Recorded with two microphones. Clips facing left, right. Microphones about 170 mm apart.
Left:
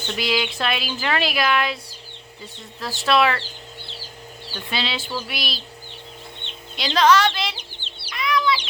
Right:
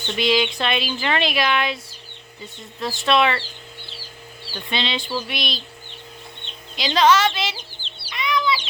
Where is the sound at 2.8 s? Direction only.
Centre (ahead or behind).